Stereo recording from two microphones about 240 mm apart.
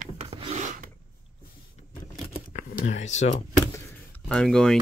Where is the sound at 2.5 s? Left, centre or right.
Left.